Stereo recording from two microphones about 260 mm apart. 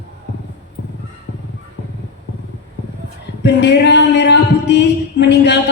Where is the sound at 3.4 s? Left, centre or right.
Left.